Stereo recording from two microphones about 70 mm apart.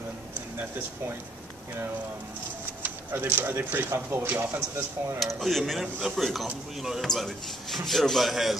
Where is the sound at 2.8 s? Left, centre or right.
Right.